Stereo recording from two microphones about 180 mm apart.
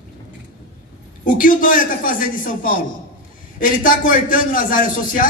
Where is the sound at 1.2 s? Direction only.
50° left (ahead or behind).